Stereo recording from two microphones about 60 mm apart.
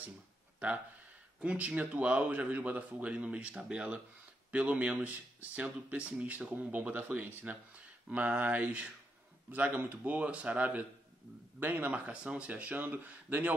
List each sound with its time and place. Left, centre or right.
1.4 s speech: centre